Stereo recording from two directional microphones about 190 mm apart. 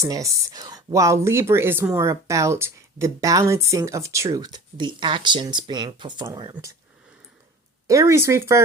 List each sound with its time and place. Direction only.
0.0 s speech: 20° right (ahead or behind)
7.9 s speech: 15° right (ahead or behind)